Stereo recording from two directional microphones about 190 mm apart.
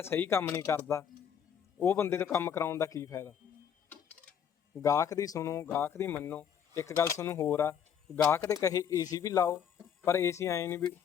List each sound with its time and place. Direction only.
0.0 s speech: 10° left (ahead or behind)
4.8 s speech: 15° left (ahead or behind)